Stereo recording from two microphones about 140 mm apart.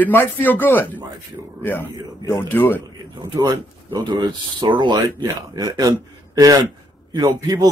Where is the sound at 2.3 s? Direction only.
15° left (ahead or behind).